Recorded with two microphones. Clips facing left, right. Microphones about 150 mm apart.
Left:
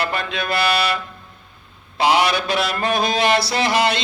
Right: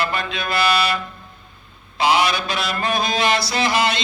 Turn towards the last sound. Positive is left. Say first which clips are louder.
# left 1 dB
turn(degrees=60)  # may be behind; listen again after turning